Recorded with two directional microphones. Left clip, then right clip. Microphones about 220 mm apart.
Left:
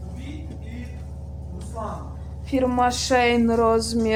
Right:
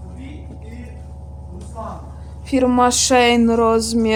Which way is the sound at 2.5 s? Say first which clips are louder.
Right 5 dB; 50° right (ahead or behind).